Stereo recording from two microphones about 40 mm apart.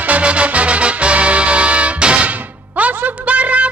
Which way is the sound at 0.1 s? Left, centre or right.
Right.